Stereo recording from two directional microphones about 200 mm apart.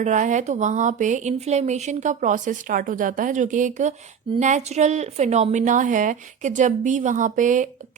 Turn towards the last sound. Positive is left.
turn(degrees=-40)  # may be behind; listen again after turning